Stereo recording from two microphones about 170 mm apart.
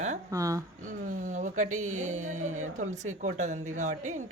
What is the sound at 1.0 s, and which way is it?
Speech, 50° right (ahead or behind).